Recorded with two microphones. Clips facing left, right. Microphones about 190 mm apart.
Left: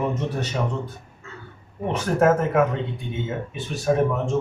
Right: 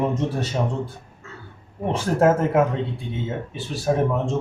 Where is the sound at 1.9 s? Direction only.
30° right (ahead or behind).